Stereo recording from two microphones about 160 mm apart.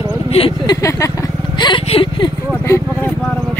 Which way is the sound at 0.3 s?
35° left (ahead or behind).